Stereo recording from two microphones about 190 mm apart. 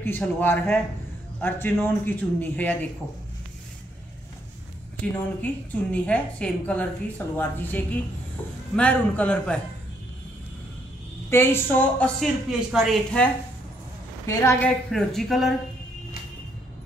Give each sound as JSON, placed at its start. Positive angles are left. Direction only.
{"t": 0.0, "sound": "a woman's voice", "side_deg": 10}
{"t": 5.4, "sound": "a woman's voice", "side_deg": 10}
{"t": 11.2, "sound": "a woman's voice", "side_deg": 10}
{"t": 14.2, "sound": "a woman's voice", "side_deg": 15}
{"t": 14.9, "sound": "speech", "side_deg": 0}